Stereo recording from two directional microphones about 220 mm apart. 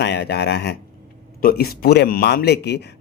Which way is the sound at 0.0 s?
50° left (ahead or behind).